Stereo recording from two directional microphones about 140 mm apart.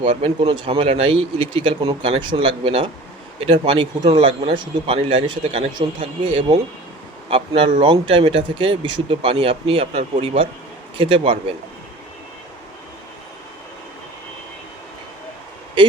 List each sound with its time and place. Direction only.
0.0 s speech: 40° right (ahead or behind)